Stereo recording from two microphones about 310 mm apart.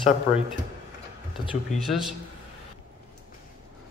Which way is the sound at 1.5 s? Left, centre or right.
Centre.